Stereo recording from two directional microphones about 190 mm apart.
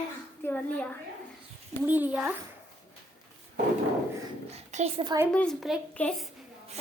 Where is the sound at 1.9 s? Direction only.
10° right (ahead or behind).